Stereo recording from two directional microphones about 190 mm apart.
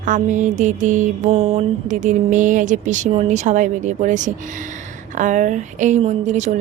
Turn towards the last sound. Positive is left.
turn(degrees=-40)  # may be behind; listen again after turning